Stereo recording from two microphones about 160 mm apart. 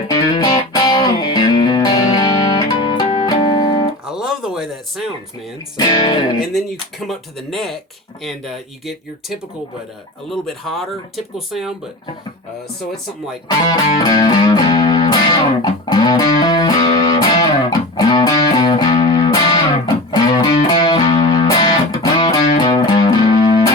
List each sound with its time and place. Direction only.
0.1 s music: 25° left (ahead or behind)
4.0 s a sound: 5° right (ahead or behind)
5.7 s speech: 30° left (ahead or behind)
6.4 s speech: centre (ahead or behind)
13.5 s music: 25° left (ahead or behind)